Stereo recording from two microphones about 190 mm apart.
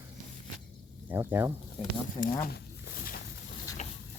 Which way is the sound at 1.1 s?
10° right (ahead or behind).